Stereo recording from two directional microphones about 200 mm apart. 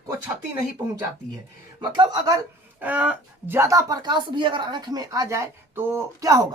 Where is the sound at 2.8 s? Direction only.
5° right (ahead or behind).